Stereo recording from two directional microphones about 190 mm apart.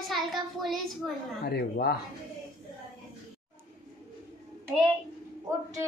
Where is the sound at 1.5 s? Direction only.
55° left (ahead or behind).